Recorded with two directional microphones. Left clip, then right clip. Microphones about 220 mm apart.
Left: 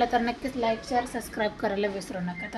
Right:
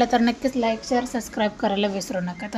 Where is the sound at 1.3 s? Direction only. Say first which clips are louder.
Right 5 dB; 30° right (ahead or behind).